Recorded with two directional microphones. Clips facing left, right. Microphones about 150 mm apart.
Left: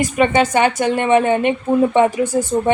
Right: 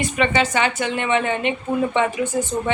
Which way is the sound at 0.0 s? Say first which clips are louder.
Left 5 dB; 45° left (ahead or behind).